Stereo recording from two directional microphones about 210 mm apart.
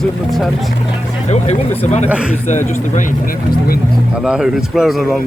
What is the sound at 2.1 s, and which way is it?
Speech, 5° right (ahead or behind).